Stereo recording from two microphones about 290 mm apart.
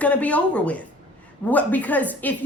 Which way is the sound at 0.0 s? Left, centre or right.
Centre.